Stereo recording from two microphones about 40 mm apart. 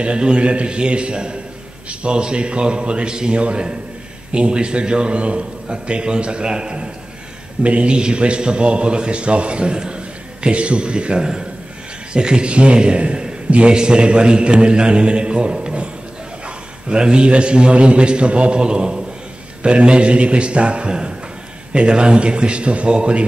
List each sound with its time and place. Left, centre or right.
0.0 s a man's voice: right